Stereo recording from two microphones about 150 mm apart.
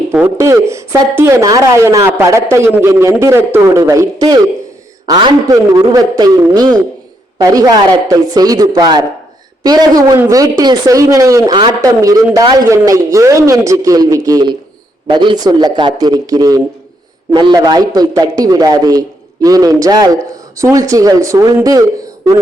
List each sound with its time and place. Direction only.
0.3 s a man's voice: 20° right (ahead or behind)